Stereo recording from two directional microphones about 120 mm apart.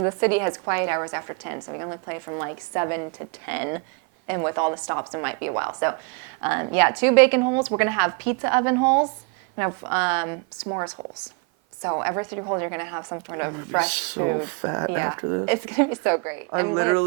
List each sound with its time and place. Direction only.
0.0 s a woman's voice: 20° right (ahead or behind)